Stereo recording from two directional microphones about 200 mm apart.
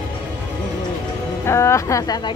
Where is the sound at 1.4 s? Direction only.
15° left (ahead or behind).